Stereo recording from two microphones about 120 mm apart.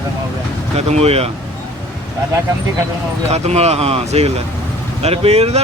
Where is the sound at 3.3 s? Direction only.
65° right (ahead or behind).